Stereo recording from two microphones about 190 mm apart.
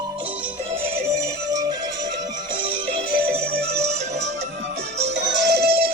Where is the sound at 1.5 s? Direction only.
20° right (ahead or behind).